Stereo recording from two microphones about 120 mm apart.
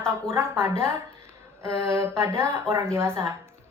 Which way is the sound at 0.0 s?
20° right (ahead or behind).